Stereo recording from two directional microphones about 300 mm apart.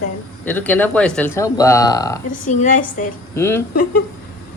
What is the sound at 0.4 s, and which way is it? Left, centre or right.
A man's voice, centre.